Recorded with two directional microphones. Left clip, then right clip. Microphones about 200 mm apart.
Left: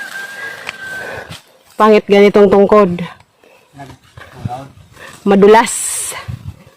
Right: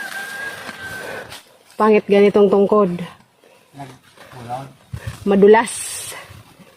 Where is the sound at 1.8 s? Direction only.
30° left (ahead or behind).